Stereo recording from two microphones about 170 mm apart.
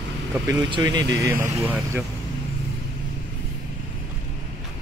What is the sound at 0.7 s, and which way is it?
Speech, 25° right (ahead or behind).